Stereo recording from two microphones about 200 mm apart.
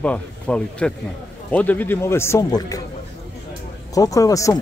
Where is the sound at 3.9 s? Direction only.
15° left (ahead or behind).